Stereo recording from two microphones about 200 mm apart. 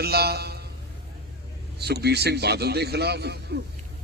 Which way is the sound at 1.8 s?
55° right (ahead or behind).